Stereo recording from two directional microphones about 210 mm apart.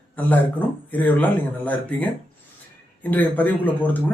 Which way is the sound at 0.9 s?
10° left (ahead or behind).